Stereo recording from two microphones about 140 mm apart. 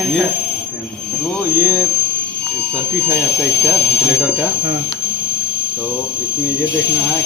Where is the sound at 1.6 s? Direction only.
25° right (ahead or behind).